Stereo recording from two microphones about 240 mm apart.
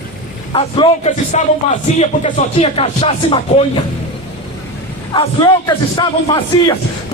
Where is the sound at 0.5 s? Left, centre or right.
Left.